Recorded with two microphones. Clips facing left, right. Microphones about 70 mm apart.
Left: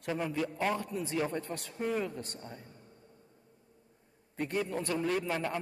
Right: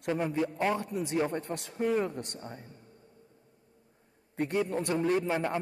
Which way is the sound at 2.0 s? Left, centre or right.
Right.